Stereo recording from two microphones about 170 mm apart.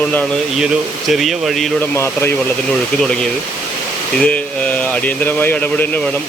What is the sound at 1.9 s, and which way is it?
Speech, 15° left (ahead or behind).